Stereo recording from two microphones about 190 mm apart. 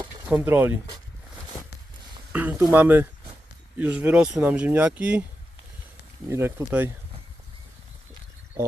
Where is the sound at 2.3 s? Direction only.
10° right (ahead or behind).